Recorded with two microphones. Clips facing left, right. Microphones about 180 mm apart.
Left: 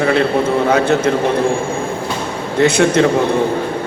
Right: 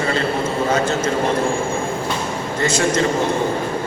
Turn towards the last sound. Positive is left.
turn(degrees=60)  # may be behind; listen again after turning